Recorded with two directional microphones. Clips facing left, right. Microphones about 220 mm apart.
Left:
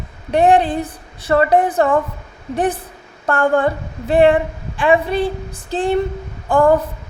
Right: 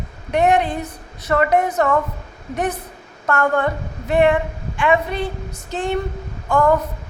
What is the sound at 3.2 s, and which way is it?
A woman's voice, 30° left (ahead or behind).